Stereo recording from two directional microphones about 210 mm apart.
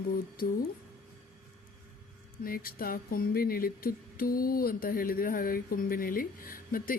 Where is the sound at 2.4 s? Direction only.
45° left (ahead or behind).